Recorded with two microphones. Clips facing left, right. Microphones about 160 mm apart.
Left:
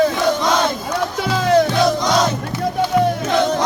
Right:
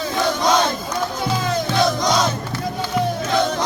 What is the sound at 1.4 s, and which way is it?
Music, 75° left (ahead or behind).